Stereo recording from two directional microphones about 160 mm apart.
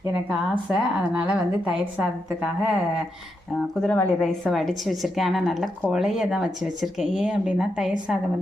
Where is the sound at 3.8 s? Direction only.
10° left (ahead or behind).